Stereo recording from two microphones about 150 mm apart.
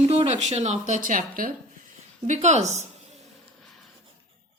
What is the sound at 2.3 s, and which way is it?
Speech, 50° right (ahead or behind).